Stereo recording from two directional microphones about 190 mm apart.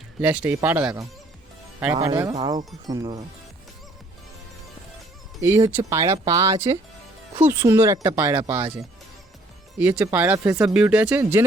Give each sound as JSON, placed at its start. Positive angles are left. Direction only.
{"t": 0.2, "sound": "speech", "side_deg": -5}
{"t": 2.0, "sound": "speech", "side_deg": -15}
{"t": 5.4, "sound": "speech", "side_deg": -15}
{"t": 9.7, "sound": "speech", "side_deg": -5}